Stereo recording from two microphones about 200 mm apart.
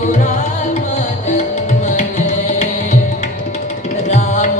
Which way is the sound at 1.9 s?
40° left (ahead or behind).